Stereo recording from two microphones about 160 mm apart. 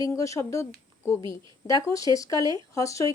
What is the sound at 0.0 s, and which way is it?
Speech, 20° left (ahead or behind).